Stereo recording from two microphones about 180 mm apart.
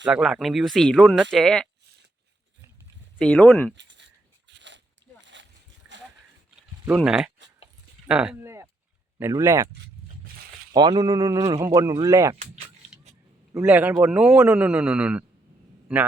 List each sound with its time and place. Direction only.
0.1 s speech: centre (ahead or behind)
3.2 s speech: 10° left (ahead or behind)
3.8 s a sound: 80° right
6.8 s speech: 5° right (ahead or behind)
8.0 s a sound: 5° right (ahead or behind)
9.1 s speech: 15° right (ahead or behind)
10.8 s speech: 25° right (ahead or behind)
13.6 s speech: 5° right (ahead or behind)